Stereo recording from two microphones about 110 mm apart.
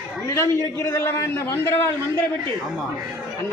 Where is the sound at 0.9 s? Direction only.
25° left (ahead or behind).